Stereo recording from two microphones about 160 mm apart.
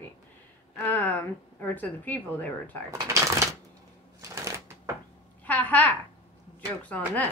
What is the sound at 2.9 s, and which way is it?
Speech, 20° right (ahead or behind).